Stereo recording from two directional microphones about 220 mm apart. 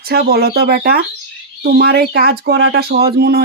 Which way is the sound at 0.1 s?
45° right (ahead or behind).